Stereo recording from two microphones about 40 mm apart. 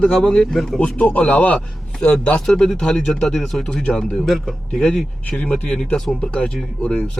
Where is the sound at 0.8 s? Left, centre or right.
Left.